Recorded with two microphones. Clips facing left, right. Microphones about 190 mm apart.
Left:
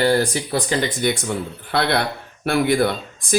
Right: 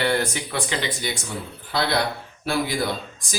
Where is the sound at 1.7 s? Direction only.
60° left (ahead or behind).